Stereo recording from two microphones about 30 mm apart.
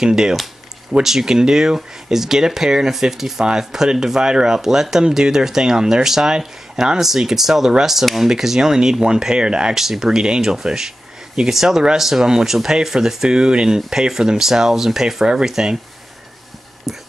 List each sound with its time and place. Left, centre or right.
0.0 s speech: right
4.6 s speech: centre
6.3 s speech: right
7.0 s speech: centre
8.5 s speech: right
9.8 s speech: centre
13.4 s speech: right
16.9 s a sound: centre